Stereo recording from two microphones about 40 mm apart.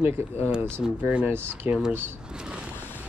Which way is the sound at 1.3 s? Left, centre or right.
Right.